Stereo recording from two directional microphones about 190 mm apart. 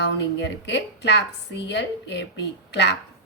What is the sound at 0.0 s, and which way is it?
A woman's voice, 65° left (ahead or behind).